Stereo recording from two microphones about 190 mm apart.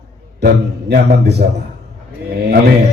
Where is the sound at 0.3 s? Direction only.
60° right (ahead or behind).